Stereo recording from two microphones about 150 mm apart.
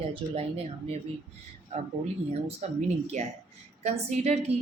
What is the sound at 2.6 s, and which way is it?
A woman's voice, 50° right (ahead or behind).